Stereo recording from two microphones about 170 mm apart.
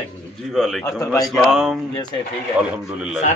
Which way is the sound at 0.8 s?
20° left (ahead or behind).